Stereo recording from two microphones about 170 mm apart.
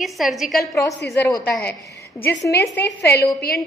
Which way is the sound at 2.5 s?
80° left.